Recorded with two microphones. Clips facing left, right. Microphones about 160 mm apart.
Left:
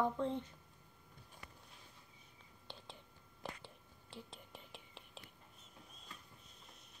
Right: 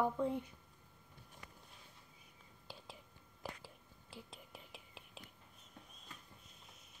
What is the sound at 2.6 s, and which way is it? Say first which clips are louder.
Whispering: even; 5° right (ahead or behind).